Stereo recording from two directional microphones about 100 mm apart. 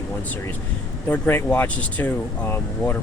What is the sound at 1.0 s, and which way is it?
Speech, 15° left (ahead or behind).